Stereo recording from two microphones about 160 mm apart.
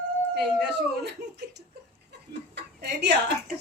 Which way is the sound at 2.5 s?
90° right.